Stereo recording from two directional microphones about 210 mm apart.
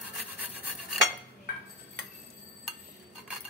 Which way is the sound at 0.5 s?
10° right (ahead or behind).